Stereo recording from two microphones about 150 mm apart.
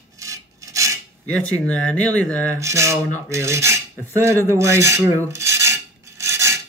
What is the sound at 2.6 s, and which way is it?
Speech, 20° right (ahead or behind).